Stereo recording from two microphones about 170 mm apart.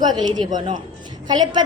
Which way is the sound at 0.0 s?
25° right (ahead or behind).